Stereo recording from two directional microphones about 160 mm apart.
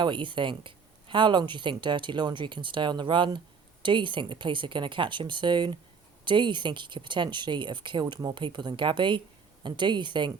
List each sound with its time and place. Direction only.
0.0 s speech: 30° right (ahead or behind)